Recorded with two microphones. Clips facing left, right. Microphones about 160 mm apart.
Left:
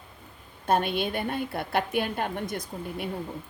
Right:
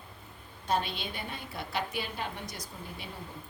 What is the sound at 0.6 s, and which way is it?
A woman's voice, 55° left (ahead or behind).